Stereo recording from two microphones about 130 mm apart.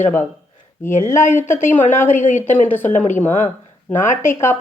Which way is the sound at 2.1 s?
75° left (ahead or behind).